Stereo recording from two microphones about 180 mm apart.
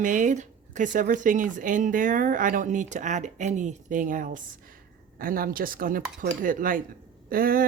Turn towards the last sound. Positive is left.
turn(degrees=-55)  # may be behind; listen again after turning